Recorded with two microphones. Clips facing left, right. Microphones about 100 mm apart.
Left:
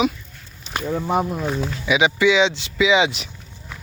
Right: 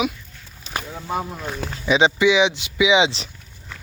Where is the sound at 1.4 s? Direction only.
5° left (ahead or behind).